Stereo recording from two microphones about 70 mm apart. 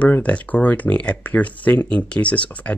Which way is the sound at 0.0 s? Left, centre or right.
Centre.